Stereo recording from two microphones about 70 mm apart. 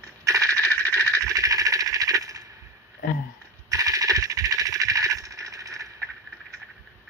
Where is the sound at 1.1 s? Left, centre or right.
Right.